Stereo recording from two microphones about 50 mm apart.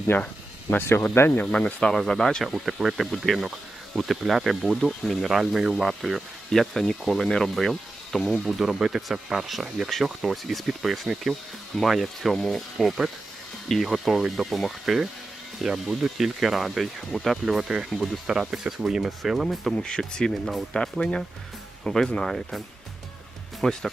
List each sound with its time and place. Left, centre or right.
0.1 s speech: left
0.7 s speech: left
1.5 s speech: left
1.9 s speech: centre
2.4 s speech: centre
4.8 s speech: centre
5.2 s speech: centre
8.4 s speech: centre
12.7 s speech: centre
19.7 s speech: centre